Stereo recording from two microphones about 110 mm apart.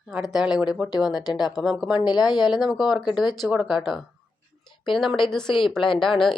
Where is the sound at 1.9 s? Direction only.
40° left (ahead or behind).